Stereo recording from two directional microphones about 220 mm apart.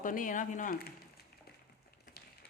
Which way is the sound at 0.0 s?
35° left (ahead or behind).